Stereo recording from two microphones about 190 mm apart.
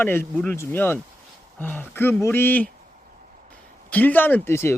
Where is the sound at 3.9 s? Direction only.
10° left (ahead or behind).